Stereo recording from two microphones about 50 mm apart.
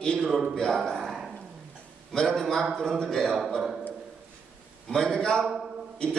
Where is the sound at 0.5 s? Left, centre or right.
Centre.